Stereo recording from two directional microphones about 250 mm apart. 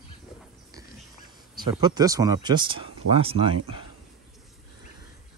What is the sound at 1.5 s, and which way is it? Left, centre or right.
Speech, centre.